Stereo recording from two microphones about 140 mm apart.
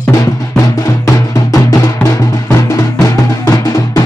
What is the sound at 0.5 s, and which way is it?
Music, 20° left (ahead or behind).